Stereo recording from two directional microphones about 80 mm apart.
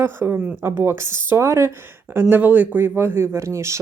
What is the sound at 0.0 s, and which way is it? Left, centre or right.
A man's voice, right.